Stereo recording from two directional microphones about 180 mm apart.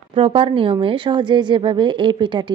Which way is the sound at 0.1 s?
30° right (ahead or behind).